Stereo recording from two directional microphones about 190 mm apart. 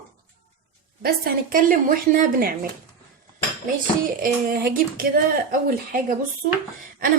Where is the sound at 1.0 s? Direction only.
50° right (ahead or behind).